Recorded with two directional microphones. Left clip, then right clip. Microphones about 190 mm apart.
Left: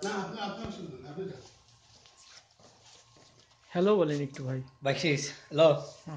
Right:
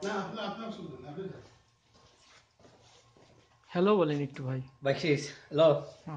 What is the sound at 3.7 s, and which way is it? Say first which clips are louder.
Speech: left 1 dB; 10° right (ahead or behind).